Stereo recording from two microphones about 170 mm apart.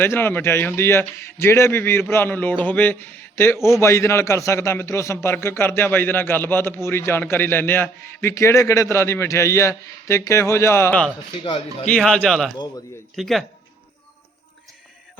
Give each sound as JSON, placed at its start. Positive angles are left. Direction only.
{"t": 0.0, "sound": "a man's voice", "side_deg": 10}
{"t": 12.5, "sound": "a man's voice", "side_deg": 25}
{"t": 13.1, "sound": "a man's voice", "side_deg": 0}